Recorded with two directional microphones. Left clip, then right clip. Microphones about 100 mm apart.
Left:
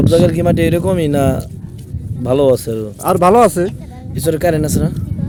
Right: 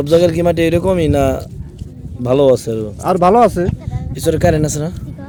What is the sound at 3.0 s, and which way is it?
Speech, 30° left (ahead or behind).